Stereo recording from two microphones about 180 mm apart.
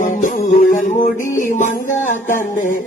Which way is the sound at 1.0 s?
45° left (ahead or behind).